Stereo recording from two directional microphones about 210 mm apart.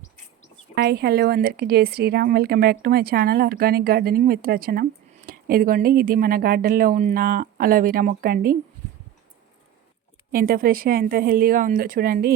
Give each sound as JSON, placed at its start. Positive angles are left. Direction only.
{"t": 0.8, "sound": "a woman's voice", "side_deg": -50}
{"t": 10.3, "sound": "a woman's voice", "side_deg": -45}